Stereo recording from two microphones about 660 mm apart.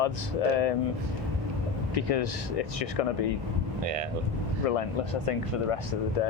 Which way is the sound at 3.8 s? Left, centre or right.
Right.